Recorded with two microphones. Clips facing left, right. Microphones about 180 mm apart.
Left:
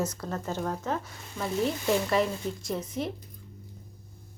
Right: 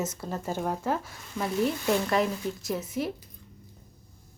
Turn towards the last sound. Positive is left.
turn(degrees=-5)  # may be behind; listen again after turning